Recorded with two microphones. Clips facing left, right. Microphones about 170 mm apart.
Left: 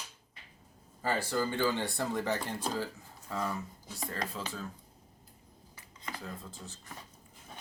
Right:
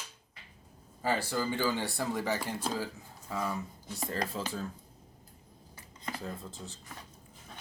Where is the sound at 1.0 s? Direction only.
10° right (ahead or behind).